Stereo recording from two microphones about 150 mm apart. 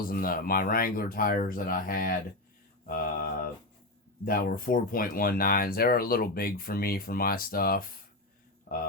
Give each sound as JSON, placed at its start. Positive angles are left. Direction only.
{"t": 0.0, "sound": "speech", "side_deg": 80}
{"t": 2.8, "sound": "mantra", "side_deg": 75}
{"t": 4.3, "sound": "speech", "side_deg": 75}